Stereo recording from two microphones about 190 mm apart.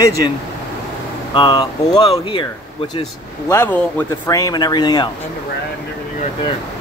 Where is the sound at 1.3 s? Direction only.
25° left (ahead or behind).